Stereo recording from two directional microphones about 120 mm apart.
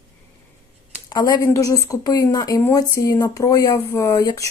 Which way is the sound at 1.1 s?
35° left (ahead or behind).